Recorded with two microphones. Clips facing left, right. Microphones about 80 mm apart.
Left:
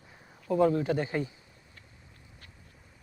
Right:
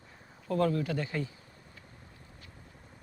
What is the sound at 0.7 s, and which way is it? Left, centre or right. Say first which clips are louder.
Speech: left 4 dB; left.